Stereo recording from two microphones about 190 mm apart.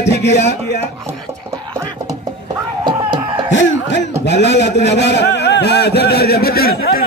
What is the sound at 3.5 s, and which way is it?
A man's voice, 65° left (ahead or behind).